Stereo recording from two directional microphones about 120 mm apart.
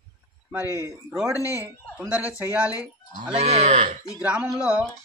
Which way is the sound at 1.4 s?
25° left (ahead or behind).